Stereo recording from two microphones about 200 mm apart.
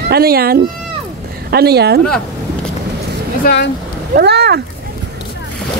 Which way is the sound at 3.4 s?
55° left (ahead or behind).